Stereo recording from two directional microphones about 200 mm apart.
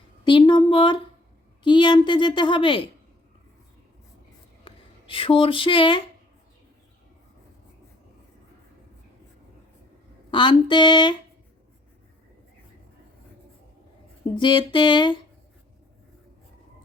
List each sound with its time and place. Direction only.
0.3 s a woman's voice: 25° left (ahead or behind)
4.6 s a sound: 25° left (ahead or behind)
10.3 s a woman's voice: 25° left (ahead or behind)
14.3 s a woman's voice: 25° left (ahead or behind)